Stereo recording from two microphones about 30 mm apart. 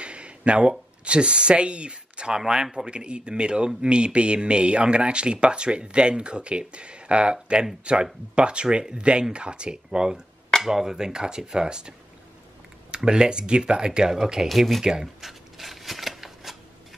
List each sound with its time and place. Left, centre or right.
0.0 s a sound: right
0.7 s speech: right
2.3 s speech: right
9.8 s speech: right
12.9 s speech: right
14.5 s speech: centre
14.8 s speech: centre
15.2 s a sound: centre